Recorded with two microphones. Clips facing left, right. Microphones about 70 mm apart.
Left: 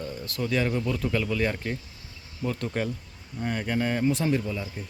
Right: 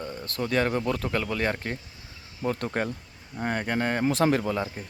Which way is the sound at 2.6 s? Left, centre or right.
Right.